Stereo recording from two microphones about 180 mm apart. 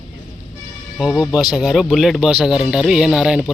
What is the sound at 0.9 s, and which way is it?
Speech, centre (ahead or behind).